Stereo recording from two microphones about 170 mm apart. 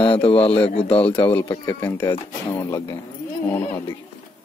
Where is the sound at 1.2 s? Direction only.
15° left (ahead or behind).